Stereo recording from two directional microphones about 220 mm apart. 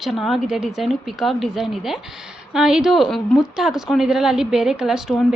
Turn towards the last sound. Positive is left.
turn(degrees=0)  # may be behind; listen again after turning